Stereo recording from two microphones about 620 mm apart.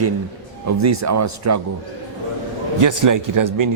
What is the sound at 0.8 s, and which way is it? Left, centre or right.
Speech, right.